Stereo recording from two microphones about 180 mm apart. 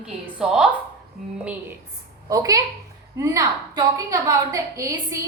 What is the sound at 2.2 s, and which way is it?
A woman's voice, 20° right (ahead or behind).